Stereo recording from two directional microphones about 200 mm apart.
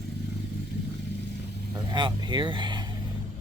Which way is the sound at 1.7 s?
20° right (ahead or behind).